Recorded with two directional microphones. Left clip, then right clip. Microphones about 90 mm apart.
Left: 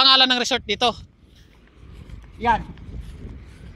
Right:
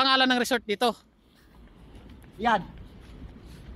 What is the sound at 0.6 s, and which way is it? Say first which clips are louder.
Speech: left 5 dB; 25° right (ahead or behind).